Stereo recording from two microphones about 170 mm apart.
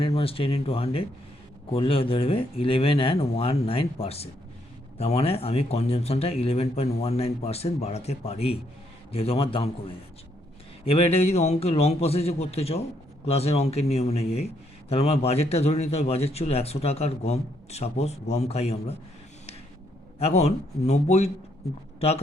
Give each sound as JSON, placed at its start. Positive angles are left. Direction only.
{"t": 0.0, "sound": "a man's voice", "side_deg": 35}
{"t": 10.8, "sound": "a man's voice", "side_deg": 35}
{"t": 20.1, "sound": "a man's voice", "side_deg": 40}